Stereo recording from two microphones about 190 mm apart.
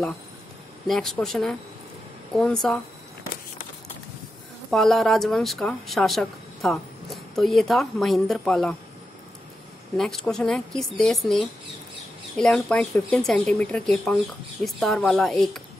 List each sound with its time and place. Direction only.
0.8 s speech: centre (ahead or behind)
4.6 s speech: centre (ahead or behind)
9.9 s speech: centre (ahead or behind)